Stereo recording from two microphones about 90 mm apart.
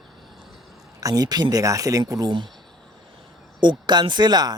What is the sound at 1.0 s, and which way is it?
A man's voice, 40° right (ahead or behind).